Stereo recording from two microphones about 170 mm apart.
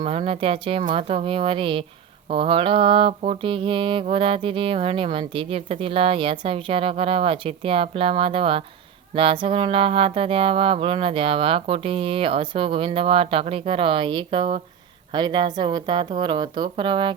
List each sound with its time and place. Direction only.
0.0 s music: 35° right (ahead or behind)
15.1 s a woman's voice: 25° right (ahead or behind)